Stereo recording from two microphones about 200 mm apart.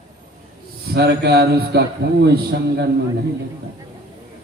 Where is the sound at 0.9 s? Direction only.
55° right (ahead or behind).